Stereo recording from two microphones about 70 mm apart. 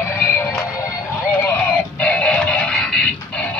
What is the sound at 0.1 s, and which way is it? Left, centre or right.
Music, left.